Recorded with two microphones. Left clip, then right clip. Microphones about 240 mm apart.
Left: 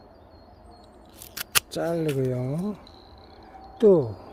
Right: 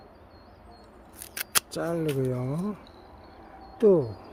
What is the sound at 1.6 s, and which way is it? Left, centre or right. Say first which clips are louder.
Speech: left 3 dB; centre.